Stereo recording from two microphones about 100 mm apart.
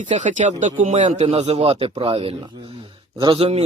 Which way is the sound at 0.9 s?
90° right.